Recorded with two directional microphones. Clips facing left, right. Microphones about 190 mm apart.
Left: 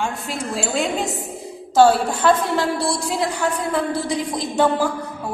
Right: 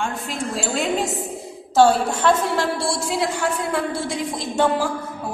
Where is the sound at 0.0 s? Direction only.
Centre (ahead or behind).